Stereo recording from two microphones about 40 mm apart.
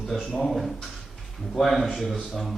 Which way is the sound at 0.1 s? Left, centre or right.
Centre.